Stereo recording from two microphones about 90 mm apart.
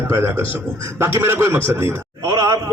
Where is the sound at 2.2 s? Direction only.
35° right (ahead or behind).